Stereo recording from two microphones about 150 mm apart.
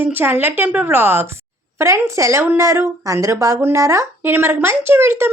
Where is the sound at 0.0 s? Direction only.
15° right (ahead or behind).